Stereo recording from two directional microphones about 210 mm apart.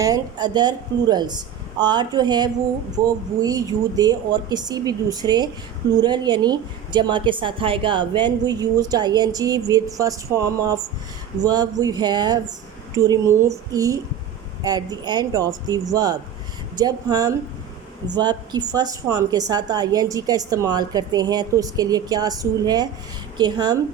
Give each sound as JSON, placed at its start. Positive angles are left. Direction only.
{"t": 0.0, "sound": "a woman's voice", "side_deg": -20}